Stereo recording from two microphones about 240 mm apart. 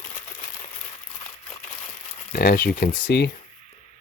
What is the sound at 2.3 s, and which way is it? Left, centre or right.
Speech, left.